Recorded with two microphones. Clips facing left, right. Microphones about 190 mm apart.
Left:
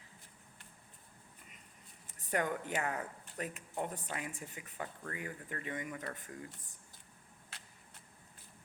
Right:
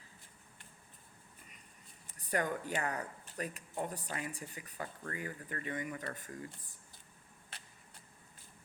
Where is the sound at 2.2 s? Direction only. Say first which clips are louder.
Even; 20° left (ahead or behind).